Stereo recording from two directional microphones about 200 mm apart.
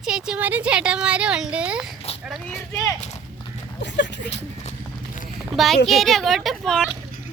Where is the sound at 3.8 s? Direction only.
60° left (ahead or behind).